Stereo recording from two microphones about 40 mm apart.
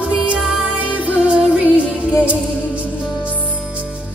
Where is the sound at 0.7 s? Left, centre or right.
Right.